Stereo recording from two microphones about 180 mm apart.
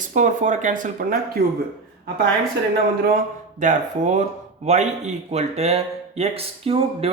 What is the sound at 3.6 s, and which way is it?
Speech, 40° right (ahead or behind).